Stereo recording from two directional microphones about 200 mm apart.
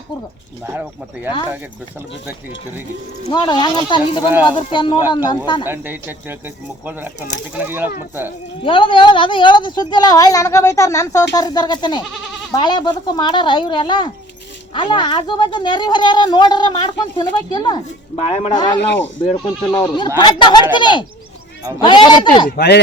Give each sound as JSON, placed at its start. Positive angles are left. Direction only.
{"t": 3.2, "sound": "a woman's voice", "side_deg": 20}
{"t": 5.6, "sound": "speech", "side_deg": -10}
{"t": 8.6, "sound": "a woman's voice", "side_deg": 25}
{"t": 22.4, "sound": "speech", "side_deg": 55}